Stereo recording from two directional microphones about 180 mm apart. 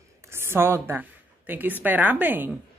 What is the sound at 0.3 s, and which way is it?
A woman's voice, 15° right (ahead or behind).